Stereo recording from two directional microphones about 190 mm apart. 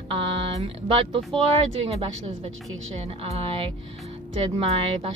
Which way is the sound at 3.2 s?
30° right (ahead or behind).